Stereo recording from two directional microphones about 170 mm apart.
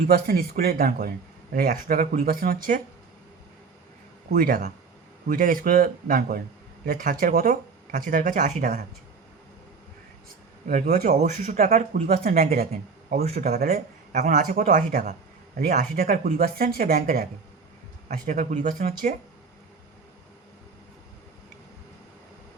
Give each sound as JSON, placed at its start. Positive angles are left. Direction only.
{"t": 0.1, "sound": "speech", "side_deg": -60}
{"t": 4.3, "sound": "speech", "side_deg": -50}
{"t": 10.7, "sound": "speech", "side_deg": -50}
{"t": 13.7, "sound": "speech", "side_deg": -50}
{"t": 15.5, "sound": "speech", "side_deg": -60}
{"t": 18.3, "sound": "speech", "side_deg": -50}